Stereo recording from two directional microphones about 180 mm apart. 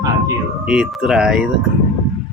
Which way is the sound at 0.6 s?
5° right (ahead or behind).